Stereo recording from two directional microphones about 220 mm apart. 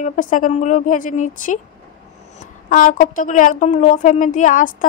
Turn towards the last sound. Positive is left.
turn(degrees=35)  # may be behind; listen again after turning